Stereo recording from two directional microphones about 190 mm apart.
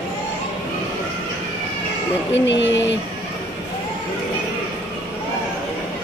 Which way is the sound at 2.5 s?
70° left (ahead or behind).